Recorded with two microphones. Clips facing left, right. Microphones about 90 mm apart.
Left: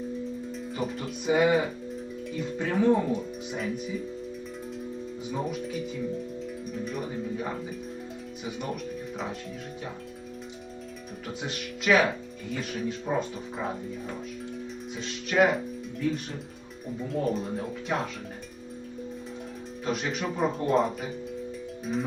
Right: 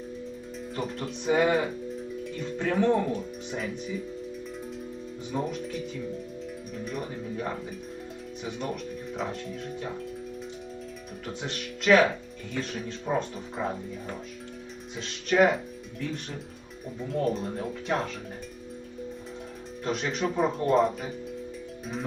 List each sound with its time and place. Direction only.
0.8 s speech: centre (ahead or behind)
2.6 s speech: 5° left (ahead or behind)
5.3 s speech: centre (ahead or behind)
11.4 s speech: 5° left (ahead or behind)
13.1 s speech: centre (ahead or behind)
19.8 s speech: 5° left (ahead or behind)